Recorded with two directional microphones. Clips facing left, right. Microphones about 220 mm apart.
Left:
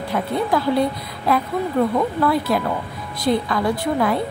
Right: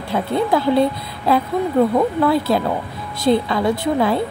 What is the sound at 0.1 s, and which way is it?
A woman's voice, 25° right (ahead or behind).